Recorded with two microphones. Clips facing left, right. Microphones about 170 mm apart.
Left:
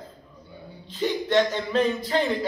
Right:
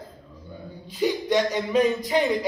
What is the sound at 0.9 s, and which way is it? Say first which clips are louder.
A man's voice: even; 15° right (ahead or behind).